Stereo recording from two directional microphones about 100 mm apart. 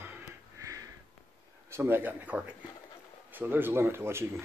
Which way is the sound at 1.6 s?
25° right (ahead or behind).